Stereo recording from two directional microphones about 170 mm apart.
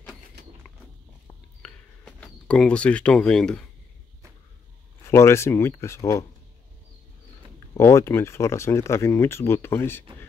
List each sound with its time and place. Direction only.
1.6 s a sound: 5° left (ahead or behind)
5.1 s speech: 15° left (ahead or behind)
7.7 s speech: 15° left (ahead or behind)